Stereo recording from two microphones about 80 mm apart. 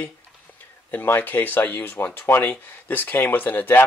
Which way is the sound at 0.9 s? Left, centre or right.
Left.